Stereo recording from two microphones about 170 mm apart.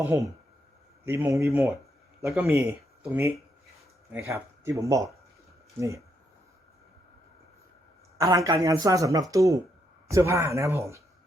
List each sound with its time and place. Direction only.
0.0 s speech: 20° right (ahead or behind)
8.2 s speech: 20° right (ahead or behind)